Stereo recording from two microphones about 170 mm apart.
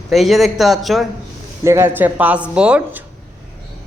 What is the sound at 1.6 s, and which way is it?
Speech, 15° right (ahead or behind).